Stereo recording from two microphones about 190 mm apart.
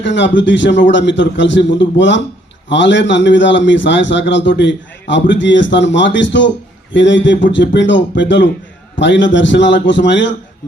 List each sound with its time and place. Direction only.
0.0 s a man's voice: 70° left (ahead or behind)